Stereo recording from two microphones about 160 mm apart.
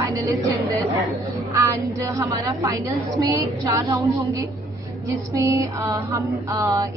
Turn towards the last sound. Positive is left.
turn(degrees=-20)  # may be behind; listen again after turning